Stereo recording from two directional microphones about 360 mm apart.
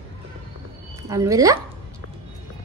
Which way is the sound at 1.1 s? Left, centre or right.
Centre.